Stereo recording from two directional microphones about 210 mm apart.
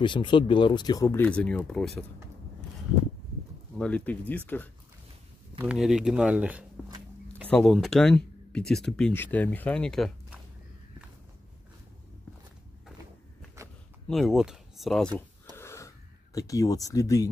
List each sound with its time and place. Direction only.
0.0 s speech: 20° left (ahead or behind); by 2.0 s 5° left (ahead or behind)
3.7 s speech: 5° left (ahead or behind)
5.6 s speech: 5° right (ahead or behind)
7.4 s speech: 5° left (ahead or behind)
13.6 s a sound: 15° right (ahead or behind)
14.0 s speech: centre (ahead or behind)
15.5 s wheeze: 15° left (ahead or behind)
16.3 s speech: 15° left (ahead or behind)